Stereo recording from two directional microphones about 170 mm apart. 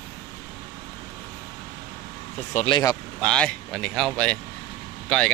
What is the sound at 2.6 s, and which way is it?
Speech, 25° left (ahead or behind).